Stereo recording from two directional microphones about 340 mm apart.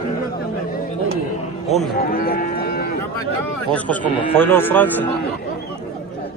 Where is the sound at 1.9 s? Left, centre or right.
Left.